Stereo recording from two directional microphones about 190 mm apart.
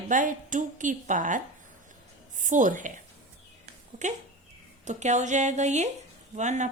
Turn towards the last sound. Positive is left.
turn(degrees=-40)  # may be behind; listen again after turning